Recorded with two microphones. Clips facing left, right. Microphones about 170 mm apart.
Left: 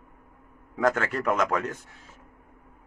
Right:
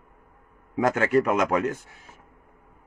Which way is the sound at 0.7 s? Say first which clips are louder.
Right 4 dB; 15° right (ahead or behind).